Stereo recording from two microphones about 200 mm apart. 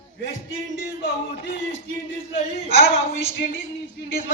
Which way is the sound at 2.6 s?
35° right (ahead or behind).